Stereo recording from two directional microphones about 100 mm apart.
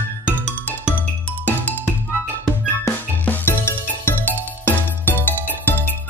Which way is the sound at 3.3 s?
20° left (ahead or behind).